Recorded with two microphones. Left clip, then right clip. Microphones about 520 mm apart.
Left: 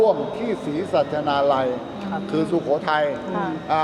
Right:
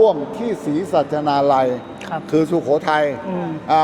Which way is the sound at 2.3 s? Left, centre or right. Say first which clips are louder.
Right 5 dB; right.